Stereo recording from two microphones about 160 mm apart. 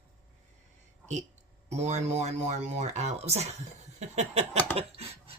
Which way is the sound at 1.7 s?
45° right (ahead or behind).